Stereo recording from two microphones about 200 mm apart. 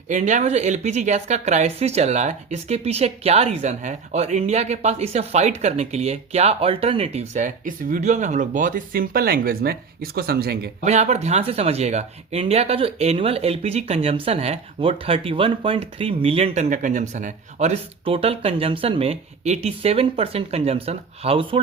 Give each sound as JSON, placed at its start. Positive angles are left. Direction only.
{"t": 0.1, "sound": "speech", "side_deg": -35}
{"t": 10.8, "sound": "speech", "side_deg": -35}